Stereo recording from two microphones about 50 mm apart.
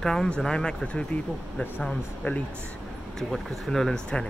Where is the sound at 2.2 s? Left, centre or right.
Left.